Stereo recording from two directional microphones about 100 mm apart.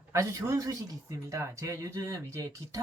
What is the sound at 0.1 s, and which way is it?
Speech, 30° right (ahead or behind).